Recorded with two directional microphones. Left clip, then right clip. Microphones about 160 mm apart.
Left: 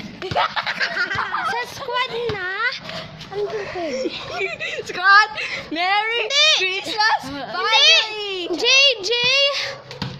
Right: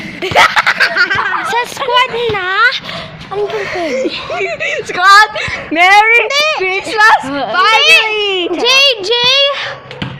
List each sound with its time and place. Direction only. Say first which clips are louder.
0.3 s a sound: right 13 dB; 35° right (ahead or behind)
1.9 s speech: right 11 dB; 15° right (ahead or behind)
2.4 s speech: right 15 dB; 5° right (ahead or behind)
3.6 s a woman's voice: right 9 dB; 55° right (ahead or behind); by 6.2 s 30° right (ahead or behind)
6.2 s a child's voice: right 4 dB; centre (ahead or behind)
6.7 s speech: right 11 dB; 50° right (ahead or behind)
7.3 s a woman's voice: right 13 dB; 25° right (ahead or behind)
7.5 s a child's voice: right 10 dB; 55° right (ahead or behind)
7.8 s a child's voice: right 3 dB; 10° left (ahead or behind)
8.1 s a child's voice: right 13 dB; 55° right (ahead or behind)
8.5 s a child's voice: right 5 dB; 5° left (ahead or behind)